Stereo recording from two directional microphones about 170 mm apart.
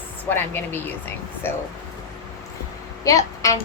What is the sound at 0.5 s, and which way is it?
A woman's voice, 10° left (ahead or behind).